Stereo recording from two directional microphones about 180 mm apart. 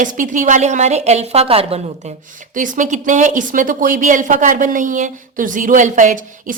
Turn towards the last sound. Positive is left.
turn(degrees=-45)  # may be behind; listen again after turning